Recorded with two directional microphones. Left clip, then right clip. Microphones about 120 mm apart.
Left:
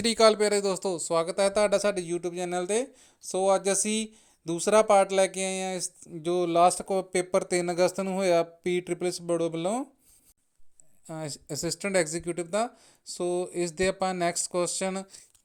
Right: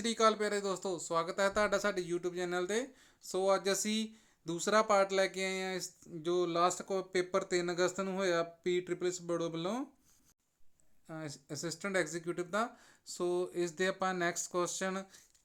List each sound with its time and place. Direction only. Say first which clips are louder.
0.0 s speech: left 9 dB; 90° left; by 9.8 s 50° left (ahead or behind)
11.0 s speech: left 8 dB; 90° left; by 15.2 s 45° left (ahead or behind)